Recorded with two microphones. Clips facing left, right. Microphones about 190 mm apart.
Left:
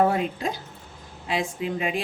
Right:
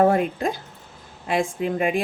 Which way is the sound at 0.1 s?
50° right (ahead or behind).